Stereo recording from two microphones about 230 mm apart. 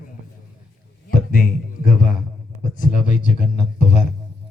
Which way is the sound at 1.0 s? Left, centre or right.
Left.